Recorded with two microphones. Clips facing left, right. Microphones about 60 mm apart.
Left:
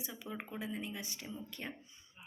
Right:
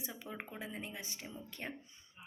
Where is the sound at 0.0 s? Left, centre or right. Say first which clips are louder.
Left 1 dB; right.